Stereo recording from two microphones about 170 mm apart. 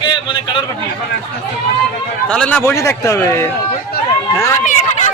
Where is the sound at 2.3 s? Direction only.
5° left (ahead or behind).